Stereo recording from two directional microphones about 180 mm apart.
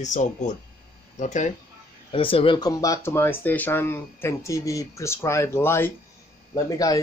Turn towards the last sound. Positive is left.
turn(degrees=20)  # may be behind; listen again after turning